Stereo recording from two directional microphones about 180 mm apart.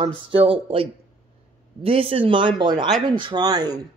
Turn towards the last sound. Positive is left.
turn(degrees=-25)  # may be behind; listen again after turning